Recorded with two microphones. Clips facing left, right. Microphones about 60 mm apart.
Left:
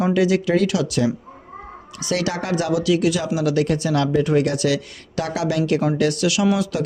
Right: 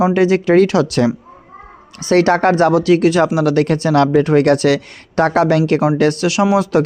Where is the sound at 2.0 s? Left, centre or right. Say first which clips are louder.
Right 11 dB; right.